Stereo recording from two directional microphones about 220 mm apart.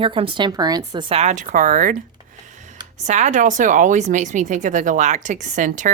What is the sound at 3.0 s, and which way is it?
Speech, 30° right (ahead or behind).